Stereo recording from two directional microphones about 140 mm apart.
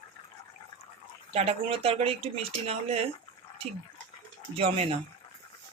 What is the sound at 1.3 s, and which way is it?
Speech, 50° right (ahead or behind).